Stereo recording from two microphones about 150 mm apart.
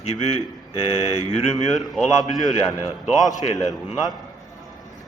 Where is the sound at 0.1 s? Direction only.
45° left (ahead or behind).